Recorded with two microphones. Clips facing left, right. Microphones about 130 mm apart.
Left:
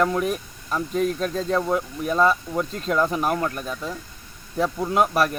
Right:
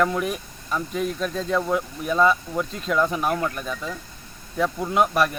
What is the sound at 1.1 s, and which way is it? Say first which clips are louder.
Speech: left 1 dB; 40° left (ahead or behind).